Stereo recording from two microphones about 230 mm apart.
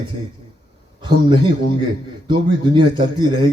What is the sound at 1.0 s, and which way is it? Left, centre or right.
A man's voice, centre.